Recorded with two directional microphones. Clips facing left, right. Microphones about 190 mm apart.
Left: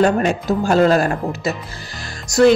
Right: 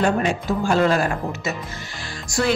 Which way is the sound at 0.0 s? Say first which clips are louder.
Left 4 dB; 40° left (ahead or behind).